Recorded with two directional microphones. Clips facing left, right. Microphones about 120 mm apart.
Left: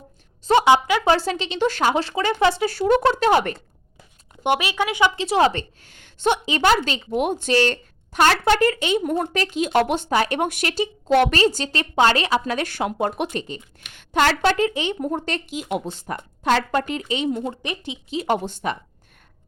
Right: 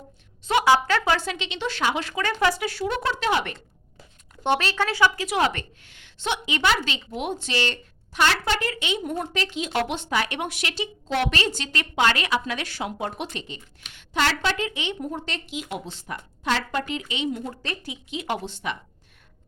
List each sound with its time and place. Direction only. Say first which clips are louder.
0.6 s a woman's voice: even; 15° left (ahead or behind)
1.0 s a woman's voice: left 5 dB; 35° left (ahead or behind)
2.6 s speech: left 8 dB; 45° left (ahead or behind)
4.4 s a woman's voice: left 2 dB; 15° left (ahead or behind); by 6.4 s 45° left (ahead or behind)
6.4 s speech: left 5 dB; 35° left (ahead or behind)
17.4 s a woman's voice: left 4 dB; 20° left (ahead or behind)
18.1 s speech: left 7 dB; 45° left (ahead or behind)